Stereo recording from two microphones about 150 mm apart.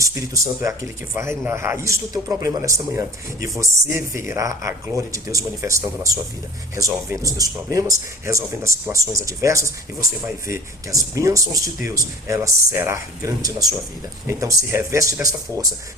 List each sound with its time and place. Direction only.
0.0 s speech: 20° right (ahead or behind)
12.7 s speech: 15° right (ahead or behind)